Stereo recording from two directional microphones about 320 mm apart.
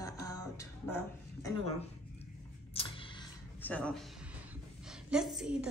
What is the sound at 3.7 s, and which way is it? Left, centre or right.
A woman's voice, centre.